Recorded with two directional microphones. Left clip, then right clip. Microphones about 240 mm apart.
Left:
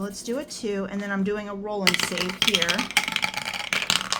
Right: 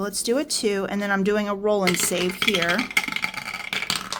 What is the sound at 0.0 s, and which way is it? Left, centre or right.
Speech, right.